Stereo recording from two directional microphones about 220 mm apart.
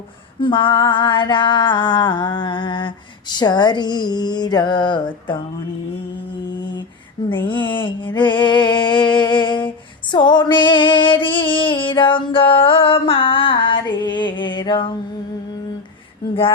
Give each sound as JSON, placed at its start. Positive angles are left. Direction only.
{"t": 0.3, "sound": "mantra", "side_deg": 20}
{"t": 7.3, "sound": "mantra", "side_deg": 20}